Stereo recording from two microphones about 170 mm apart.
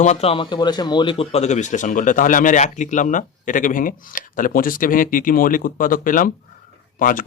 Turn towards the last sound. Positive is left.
turn(degrees=55)  # may be behind; listen again after turning